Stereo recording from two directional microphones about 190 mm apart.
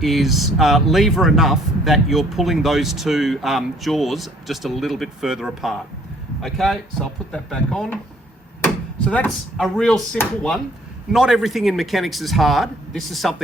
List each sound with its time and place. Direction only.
0.0 s speech: centre (ahead or behind)